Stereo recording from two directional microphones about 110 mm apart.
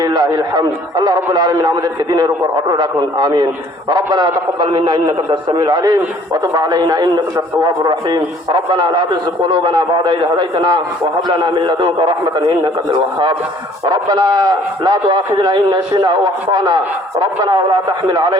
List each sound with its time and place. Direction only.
0.0 s radio: 40° right (ahead or behind)
0.5 s a man's voice: 35° right (ahead or behind)